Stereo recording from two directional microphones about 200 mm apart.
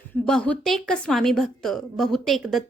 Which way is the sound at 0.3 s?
5° left (ahead or behind).